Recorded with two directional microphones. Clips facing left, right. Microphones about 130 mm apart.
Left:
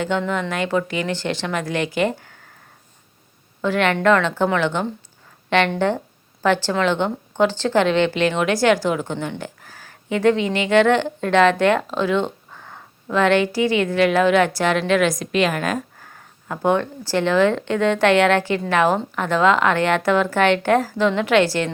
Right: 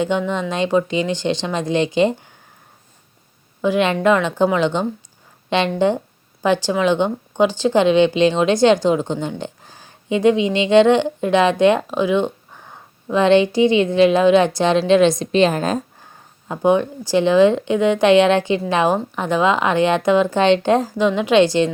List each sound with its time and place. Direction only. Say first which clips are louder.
0.0 s speech: right 2 dB; 20° right (ahead or behind)
3.6 s a woman's voice: right 2 dB; 15° right (ahead or behind)